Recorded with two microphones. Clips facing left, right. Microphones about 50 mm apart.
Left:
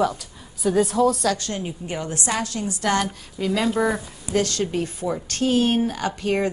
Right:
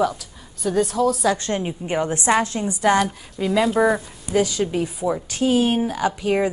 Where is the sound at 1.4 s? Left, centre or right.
Right.